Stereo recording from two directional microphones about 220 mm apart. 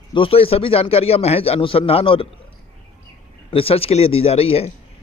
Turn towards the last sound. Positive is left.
turn(degrees=25)  # may be behind; listen again after turning